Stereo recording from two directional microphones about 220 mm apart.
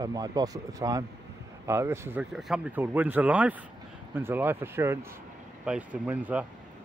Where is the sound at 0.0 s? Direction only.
15° right (ahead or behind).